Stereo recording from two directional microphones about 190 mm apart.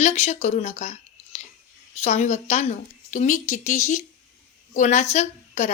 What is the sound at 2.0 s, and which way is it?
A woman's voice, 35° left (ahead or behind).